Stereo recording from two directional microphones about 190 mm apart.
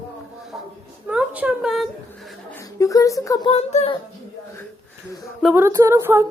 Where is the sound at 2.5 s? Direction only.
15° left (ahead or behind).